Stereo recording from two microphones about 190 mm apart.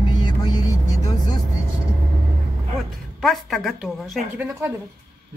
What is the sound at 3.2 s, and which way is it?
A woman's voice, centre (ahead or behind).